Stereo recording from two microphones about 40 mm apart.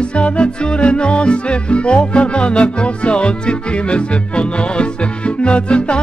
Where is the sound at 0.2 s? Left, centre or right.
Left.